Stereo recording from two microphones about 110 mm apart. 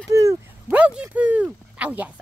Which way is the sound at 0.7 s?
10° right (ahead or behind).